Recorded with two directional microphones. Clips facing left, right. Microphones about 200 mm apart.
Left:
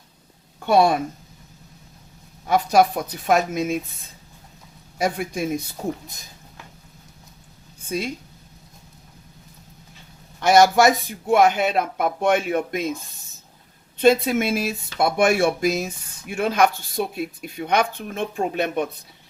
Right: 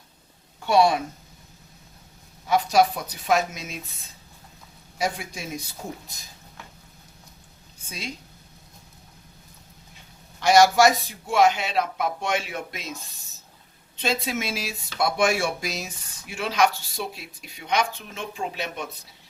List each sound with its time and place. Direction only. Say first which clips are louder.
0.6 s a woman's voice: left 2 dB; 55° left (ahead or behind)
2.5 s a woman's voice: left 3 dB; 55° left (ahead or behind)
4.9 s speech: left 5 dB; 55° left (ahead or behind)
7.9 s a woman's voice: left 10 dB; 55° left (ahead or behind)
10.4 s speech: left 2 dB; 55° left (ahead or behind)
14.0 s speech: left 10 dB; 55° left (ahead or behind)